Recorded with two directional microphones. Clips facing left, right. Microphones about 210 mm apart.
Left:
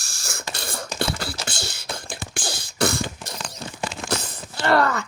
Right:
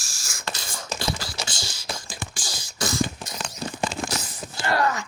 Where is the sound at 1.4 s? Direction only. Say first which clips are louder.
Left 2 dB; 60° left (ahead or behind).